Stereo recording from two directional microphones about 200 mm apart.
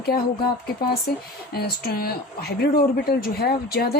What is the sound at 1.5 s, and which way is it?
A woman's voice, 50° left (ahead or behind).